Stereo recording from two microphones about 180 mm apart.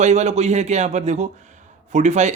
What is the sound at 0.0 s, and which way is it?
Speech, 40° right (ahead or behind).